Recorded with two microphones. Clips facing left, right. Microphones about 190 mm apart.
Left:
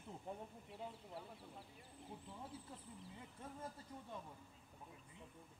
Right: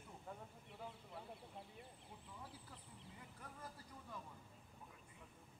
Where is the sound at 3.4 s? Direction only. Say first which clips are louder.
Left 5 dB; 25° left (ahead or behind).